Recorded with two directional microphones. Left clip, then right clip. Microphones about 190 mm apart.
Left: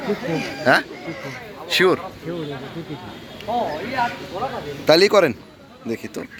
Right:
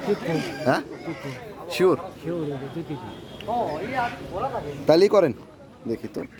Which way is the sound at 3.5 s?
20° left (ahead or behind).